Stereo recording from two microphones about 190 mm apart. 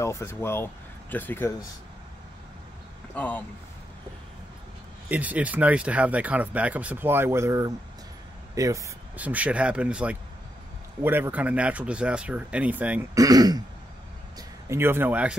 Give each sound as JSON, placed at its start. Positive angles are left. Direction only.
{"t": 0.0, "sound": "speech", "side_deg": 15}
{"t": 3.2, "sound": "speech", "side_deg": 10}
{"t": 5.0, "sound": "speech", "side_deg": -10}
{"t": 13.1, "sound": "speech", "side_deg": -20}
{"t": 14.7, "sound": "speech", "side_deg": -10}